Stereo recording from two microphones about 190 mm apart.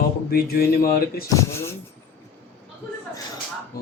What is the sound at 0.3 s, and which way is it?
Speech, 55° left (ahead or behind).